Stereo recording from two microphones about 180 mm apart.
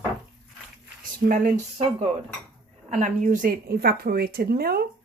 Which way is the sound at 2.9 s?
40° right (ahead or behind).